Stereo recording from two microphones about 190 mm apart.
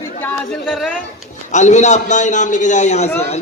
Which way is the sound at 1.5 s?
40° left (ahead or behind).